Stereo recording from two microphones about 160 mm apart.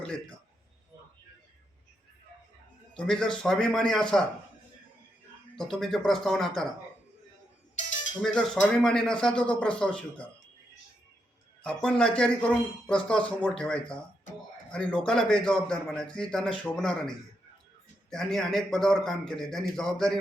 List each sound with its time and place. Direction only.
2.9 s a man's voice: 5° left (ahead or behind)
5.5 s a man's voice: centre (ahead or behind)
7.8 s music: 50° left (ahead or behind)
8.2 s a man's voice: 5° left (ahead or behind)
11.6 s a man's voice: 5° left (ahead or behind)